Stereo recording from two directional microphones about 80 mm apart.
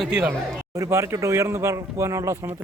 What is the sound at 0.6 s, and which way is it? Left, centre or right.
Speech, right.